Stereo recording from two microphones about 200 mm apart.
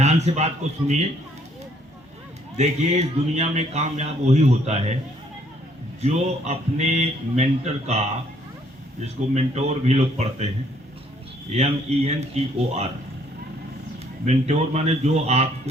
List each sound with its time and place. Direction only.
0.0 s speech: 35° right (ahead or behind)
2.6 s speech: 35° right (ahead or behind)
6.0 s speech: 35° right (ahead or behind)
9.3 s speech: 30° right (ahead or behind)
11.5 s speech: 30° right (ahead or behind)
14.3 s speech: 35° right (ahead or behind)